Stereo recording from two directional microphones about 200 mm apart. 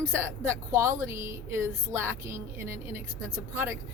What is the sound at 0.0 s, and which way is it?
Speech, 15° right (ahead or behind).